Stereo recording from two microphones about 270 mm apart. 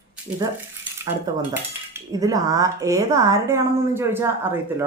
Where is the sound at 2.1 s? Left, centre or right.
Centre.